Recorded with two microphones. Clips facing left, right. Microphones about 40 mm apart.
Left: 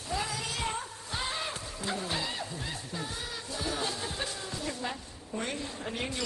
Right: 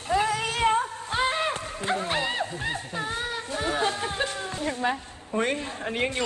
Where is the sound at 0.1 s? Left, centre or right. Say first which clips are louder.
Right 10 dB; right.